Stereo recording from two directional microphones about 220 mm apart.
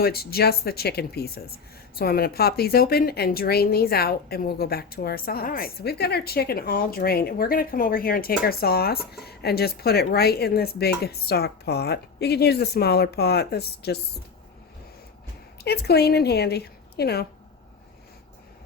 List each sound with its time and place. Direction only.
0.0 s a woman's voice: 45° left (ahead or behind)
15.6 s a woman's voice: 45° left (ahead or behind)